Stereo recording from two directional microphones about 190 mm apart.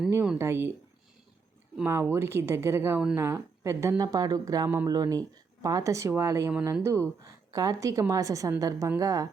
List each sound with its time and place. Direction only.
0.1 s a woman's voice: 10° right (ahead or behind)
1.7 s a woman's voice: 10° right (ahead or behind)